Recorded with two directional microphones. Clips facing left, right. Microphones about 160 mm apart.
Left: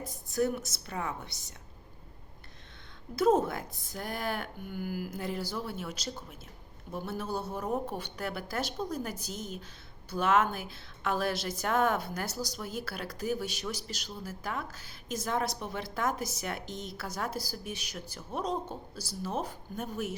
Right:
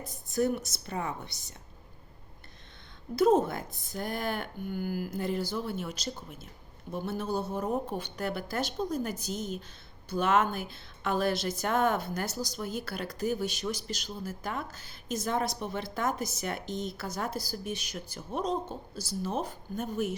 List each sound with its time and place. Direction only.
0.3 s speech: 5° left (ahead or behind)
3.3 s a woman's voice: 5° left (ahead or behind)
7.1 s a woman's voice: 5° left (ahead or behind)